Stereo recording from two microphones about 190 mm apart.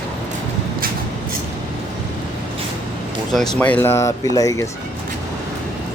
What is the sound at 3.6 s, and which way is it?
Speech, 10° left (ahead or behind).